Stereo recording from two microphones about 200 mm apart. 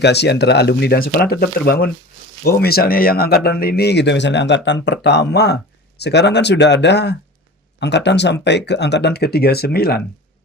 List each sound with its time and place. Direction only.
0.0 s speech: 55° left (ahead or behind)